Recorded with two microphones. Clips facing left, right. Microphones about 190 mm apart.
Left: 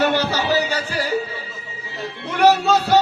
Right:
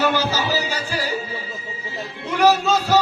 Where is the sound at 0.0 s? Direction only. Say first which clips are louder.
Left 1 dB; 65° left (ahead or behind).